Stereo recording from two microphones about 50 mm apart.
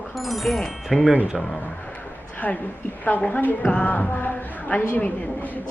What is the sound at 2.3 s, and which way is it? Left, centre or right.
A woman's voice, left.